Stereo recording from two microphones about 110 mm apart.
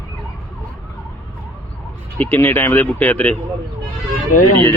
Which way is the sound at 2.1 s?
20° left (ahead or behind).